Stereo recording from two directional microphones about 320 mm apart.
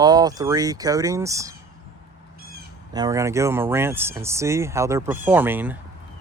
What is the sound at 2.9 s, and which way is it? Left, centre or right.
Speech, centre.